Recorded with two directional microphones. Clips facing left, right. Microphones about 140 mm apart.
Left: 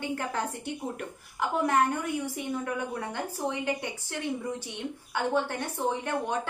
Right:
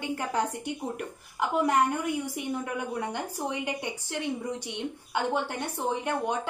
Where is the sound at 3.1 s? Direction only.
15° right (ahead or behind).